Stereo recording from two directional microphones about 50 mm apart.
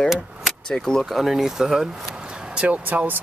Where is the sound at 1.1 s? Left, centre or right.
Centre.